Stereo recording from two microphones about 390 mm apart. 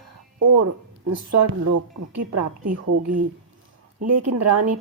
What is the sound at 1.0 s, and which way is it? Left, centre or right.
Speech, right.